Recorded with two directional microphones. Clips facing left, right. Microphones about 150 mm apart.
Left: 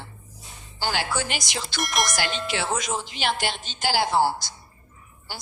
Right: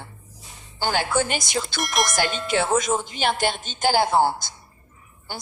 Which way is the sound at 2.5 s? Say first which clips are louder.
Right 8 dB; 50° right (ahead or behind).